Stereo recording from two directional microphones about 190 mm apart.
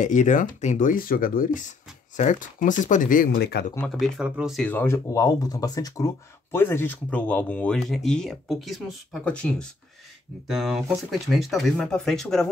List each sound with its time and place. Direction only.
0.0 s speech: 40° left (ahead or behind); by 3.6 s 60° left (ahead or behind)
3.9 s speech: 5° right (ahead or behind)